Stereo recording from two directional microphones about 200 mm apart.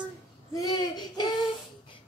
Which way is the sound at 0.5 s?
20° left (ahead or behind).